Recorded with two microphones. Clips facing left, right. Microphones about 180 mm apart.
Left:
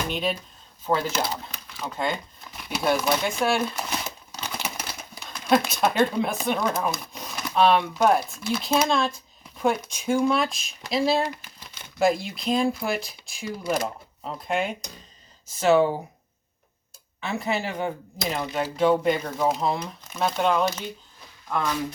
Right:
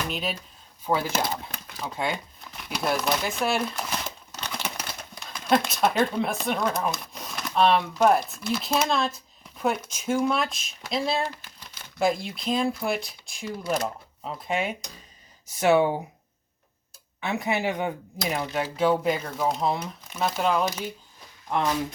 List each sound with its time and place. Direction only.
0.1 s speech: centre (ahead or behind)
1.0 s speech: 50° right (ahead or behind)
1.8 s speech: 10° right (ahead or behind)
2.4 s crumpling: centre (ahead or behind)
5.1 s speech: 5° left (ahead or behind)
15.6 s speech: 15° right (ahead or behind)
17.2 s speech: 15° right (ahead or behind)